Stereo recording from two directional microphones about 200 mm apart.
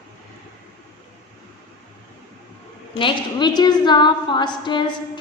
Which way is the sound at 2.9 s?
25° left (ahead or behind).